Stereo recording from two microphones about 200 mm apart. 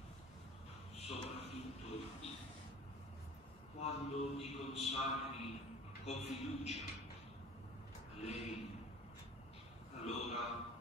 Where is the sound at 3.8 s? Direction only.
30° left (ahead or behind).